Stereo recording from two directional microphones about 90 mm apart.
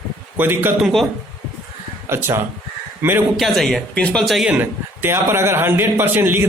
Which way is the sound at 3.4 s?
Centre (ahead or behind).